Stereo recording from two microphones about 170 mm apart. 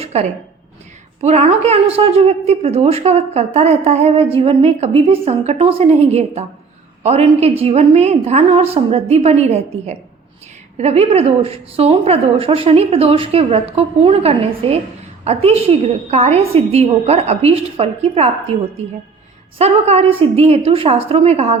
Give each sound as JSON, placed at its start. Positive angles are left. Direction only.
{"t": 0.0, "sound": "a sound", "side_deg": -40}
{"t": 1.2, "sound": "a woman's voice", "side_deg": -40}
{"t": 19.5, "sound": "a woman's voice", "side_deg": -40}